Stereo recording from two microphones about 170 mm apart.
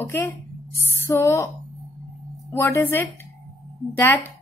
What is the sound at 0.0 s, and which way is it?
A woman's voice, 15° left (ahead or behind).